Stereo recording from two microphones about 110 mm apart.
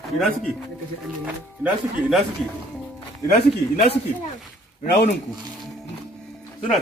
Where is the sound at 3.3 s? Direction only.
60° left (ahead or behind).